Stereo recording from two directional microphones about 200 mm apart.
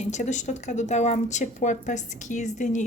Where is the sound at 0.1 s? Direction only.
35° left (ahead or behind).